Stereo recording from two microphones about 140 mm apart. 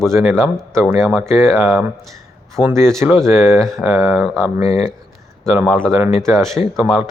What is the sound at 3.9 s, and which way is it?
Speech, 20° right (ahead or behind).